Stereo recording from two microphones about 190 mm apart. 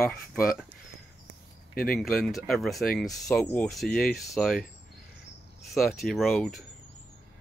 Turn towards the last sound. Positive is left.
turn(degrees=0)  # may be behind; listen again after turning